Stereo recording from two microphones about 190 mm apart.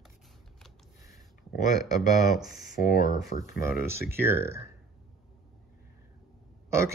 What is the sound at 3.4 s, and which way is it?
Speech, 15° right (ahead or behind).